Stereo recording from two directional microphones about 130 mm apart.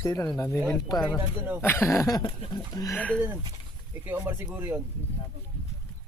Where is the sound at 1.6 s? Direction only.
15° left (ahead or behind).